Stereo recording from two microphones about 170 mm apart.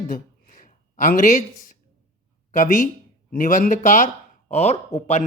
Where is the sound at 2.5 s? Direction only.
50° left (ahead or behind).